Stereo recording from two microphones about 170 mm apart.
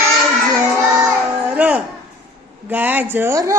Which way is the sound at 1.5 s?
5° right (ahead or behind).